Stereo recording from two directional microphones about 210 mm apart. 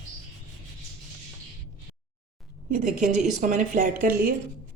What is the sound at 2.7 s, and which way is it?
A woman's voice, 40° right (ahead or behind).